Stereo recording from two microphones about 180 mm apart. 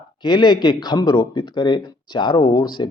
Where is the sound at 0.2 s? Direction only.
25° left (ahead or behind).